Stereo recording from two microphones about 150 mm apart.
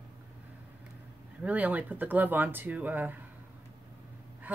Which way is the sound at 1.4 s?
10° right (ahead or behind).